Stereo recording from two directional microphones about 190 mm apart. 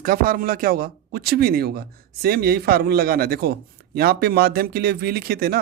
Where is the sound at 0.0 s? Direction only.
50° right (ahead or behind).